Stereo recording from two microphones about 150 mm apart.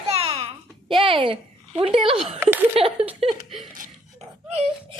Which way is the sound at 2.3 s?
10° right (ahead or behind).